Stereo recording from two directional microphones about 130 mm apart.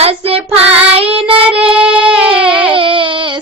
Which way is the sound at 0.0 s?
50° right (ahead or behind).